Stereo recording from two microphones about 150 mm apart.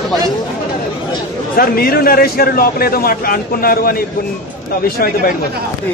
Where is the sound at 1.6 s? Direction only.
85° left.